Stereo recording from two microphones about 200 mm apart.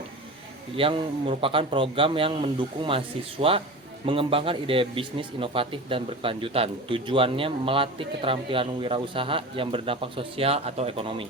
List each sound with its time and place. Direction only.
0.8 s a man's voice: 25° right (ahead or behind)